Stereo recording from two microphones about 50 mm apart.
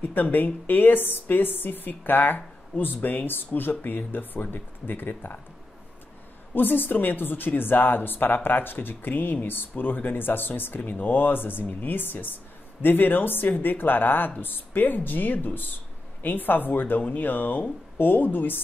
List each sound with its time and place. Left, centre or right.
0.0 s speech: left
6.5 s a woman's voice: left